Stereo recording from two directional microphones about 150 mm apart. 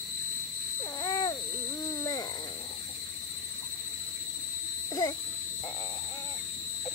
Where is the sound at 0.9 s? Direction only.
25° left (ahead or behind).